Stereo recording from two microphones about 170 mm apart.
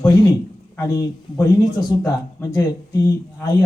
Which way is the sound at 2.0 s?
20° left (ahead or behind).